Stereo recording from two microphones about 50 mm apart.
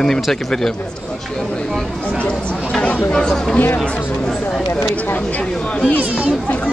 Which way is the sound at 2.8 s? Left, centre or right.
Left.